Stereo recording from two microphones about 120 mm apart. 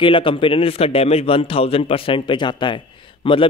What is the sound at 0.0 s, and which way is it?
A man's voice, 45° left (ahead or behind).